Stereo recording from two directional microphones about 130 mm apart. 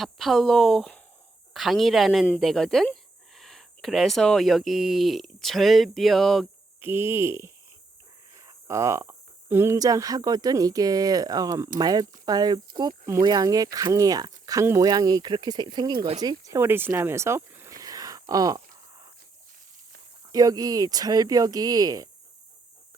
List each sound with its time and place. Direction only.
0.0 s speech: centre (ahead or behind)
6.8 s speech: 20° right (ahead or behind); by 16.0 s 35° right (ahead or behind)
16.2 s a sound: 30° right (ahead or behind)
20.3 s speech: 30° right (ahead or behind)